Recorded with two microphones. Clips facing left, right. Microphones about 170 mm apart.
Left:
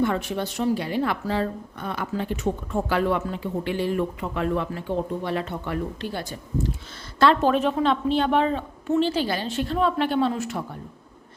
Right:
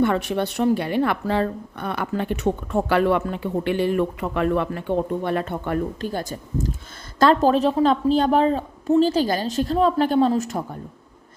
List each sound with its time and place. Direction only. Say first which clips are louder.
0.0 s a woman's voice: right 4 dB; 65° right (ahead or behind); by 10.8 s 40° right (ahead or behind)